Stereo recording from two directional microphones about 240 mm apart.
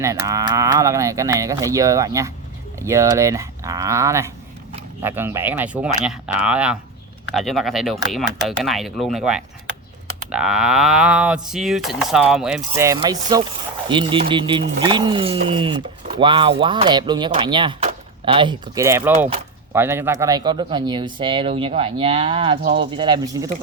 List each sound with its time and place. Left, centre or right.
0.0 s speech: centre
22.6 s speech: right
23.0 s speech: centre